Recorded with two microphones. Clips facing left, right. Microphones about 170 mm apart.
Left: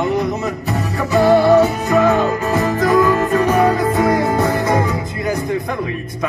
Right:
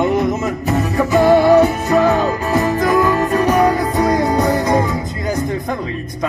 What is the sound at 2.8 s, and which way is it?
Music, 40° right (ahead or behind).